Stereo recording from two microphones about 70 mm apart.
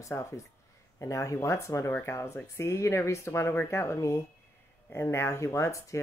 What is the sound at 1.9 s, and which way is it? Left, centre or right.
Speech, left.